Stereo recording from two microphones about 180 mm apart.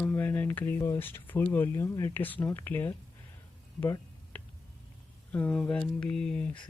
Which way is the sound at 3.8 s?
10° left (ahead or behind).